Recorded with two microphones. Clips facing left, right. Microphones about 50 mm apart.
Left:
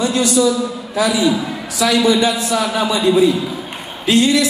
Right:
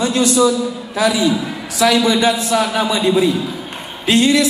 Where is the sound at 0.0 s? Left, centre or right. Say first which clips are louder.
Right 1 dB; right.